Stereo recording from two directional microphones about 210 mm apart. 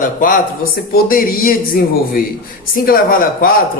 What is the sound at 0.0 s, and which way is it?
A man's voice, 40° left (ahead or behind).